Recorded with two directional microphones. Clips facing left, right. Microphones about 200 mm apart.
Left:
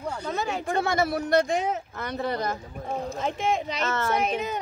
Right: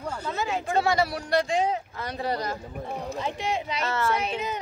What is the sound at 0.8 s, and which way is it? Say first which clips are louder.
A woman's voice: even; 50° left (ahead or behind).